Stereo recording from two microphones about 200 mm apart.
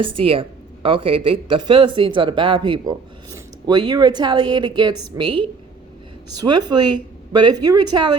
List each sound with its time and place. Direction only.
0.0 s speech: 25° right (ahead or behind)